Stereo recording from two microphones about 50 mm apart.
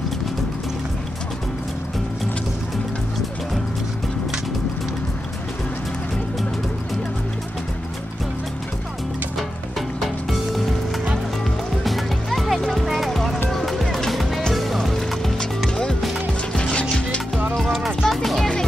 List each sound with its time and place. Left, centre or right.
9.8 s music: centre
11.8 s music: centre
16.5 s music: centre
17.7 s music: centre